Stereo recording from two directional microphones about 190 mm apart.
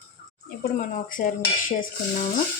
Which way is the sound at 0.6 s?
45° left (ahead or behind).